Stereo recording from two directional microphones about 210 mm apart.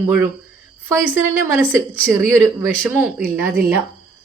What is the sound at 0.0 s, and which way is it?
Speech, 15° right (ahead or behind).